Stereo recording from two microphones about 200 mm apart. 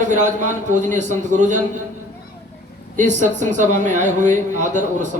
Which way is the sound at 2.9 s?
40° right (ahead or behind).